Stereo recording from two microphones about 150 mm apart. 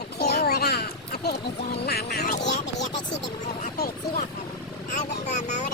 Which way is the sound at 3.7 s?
90° left.